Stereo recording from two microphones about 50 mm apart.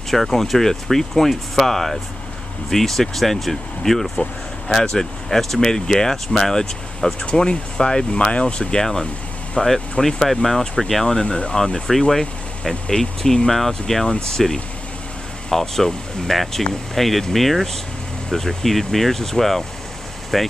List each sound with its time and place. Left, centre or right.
0.1 s speech: centre
9.6 s speech: centre